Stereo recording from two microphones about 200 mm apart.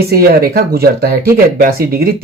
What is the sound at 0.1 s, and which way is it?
Speech, 50° right (ahead or behind).